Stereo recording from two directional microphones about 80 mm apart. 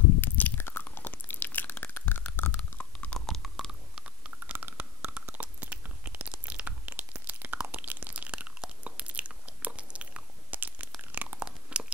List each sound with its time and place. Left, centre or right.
0.2 s biting: left
3.2 s chewing: centre
4.0 s chewing: centre
11.0 s crunch: right